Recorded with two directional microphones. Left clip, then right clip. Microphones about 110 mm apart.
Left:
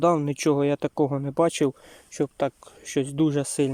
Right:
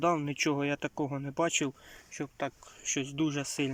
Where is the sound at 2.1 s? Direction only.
70° left (ahead or behind); by 3.7 s 40° left (ahead or behind).